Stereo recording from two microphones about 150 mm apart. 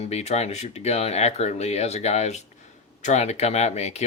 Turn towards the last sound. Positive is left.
turn(degrees=45)  # may be behind; listen again after turning